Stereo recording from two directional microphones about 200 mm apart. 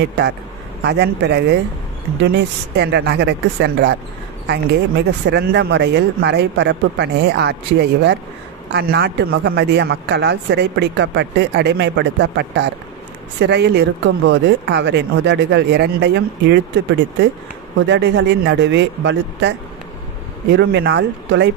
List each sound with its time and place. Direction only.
0.8 s speech: 55° right (ahead or behind)
20.5 s speech: 60° right (ahead or behind)